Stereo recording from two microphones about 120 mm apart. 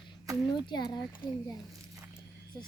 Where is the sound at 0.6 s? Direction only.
40° left (ahead or behind).